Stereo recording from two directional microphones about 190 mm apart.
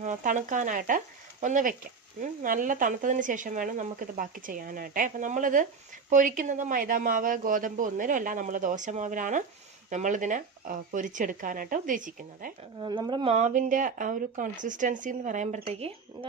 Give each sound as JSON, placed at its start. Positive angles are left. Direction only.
{"t": 0.0, "sound": "speech", "side_deg": -40}
{"t": 12.8, "sound": "speech", "side_deg": -25}